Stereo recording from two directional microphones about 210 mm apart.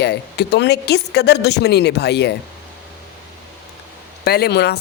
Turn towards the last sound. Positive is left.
turn(degrees=50)  # may be behind; listen again after turning